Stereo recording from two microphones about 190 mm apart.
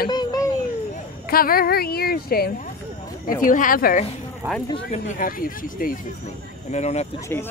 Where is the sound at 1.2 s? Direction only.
50° left (ahead or behind); by 7.1 s 35° left (ahead or behind).